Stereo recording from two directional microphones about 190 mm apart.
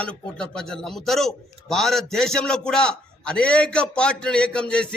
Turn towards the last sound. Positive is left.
turn(degrees=5)  # may be behind; listen again after turning